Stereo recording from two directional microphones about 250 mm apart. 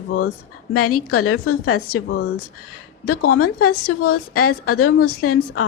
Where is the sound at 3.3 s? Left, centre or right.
Left.